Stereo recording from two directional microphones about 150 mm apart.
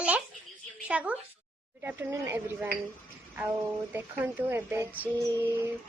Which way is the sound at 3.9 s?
15° right (ahead or behind).